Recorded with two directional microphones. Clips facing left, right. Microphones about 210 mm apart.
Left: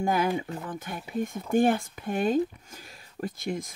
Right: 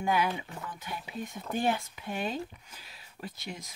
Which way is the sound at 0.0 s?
45° left (ahead or behind).